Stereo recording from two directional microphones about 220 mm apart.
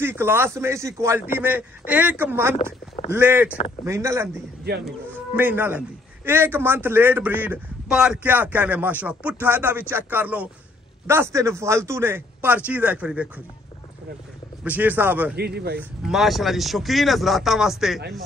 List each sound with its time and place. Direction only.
0.0 s speech: 10° right (ahead or behind)
14.6 s speech: 5° right (ahead or behind)
15.3 s speech: 45° right (ahead or behind)
15.8 s speech: centre (ahead or behind)